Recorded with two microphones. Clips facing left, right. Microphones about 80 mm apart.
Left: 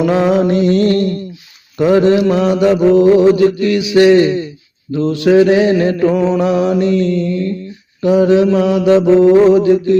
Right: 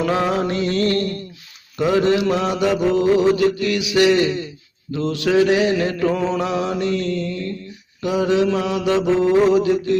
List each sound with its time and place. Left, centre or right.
0.1 s mantra: left
6.1 s mantra: left